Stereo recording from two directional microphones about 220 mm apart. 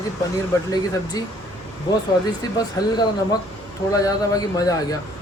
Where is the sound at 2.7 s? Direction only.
20° left (ahead or behind).